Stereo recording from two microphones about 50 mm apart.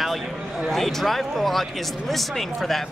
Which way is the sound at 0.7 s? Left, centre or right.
Centre.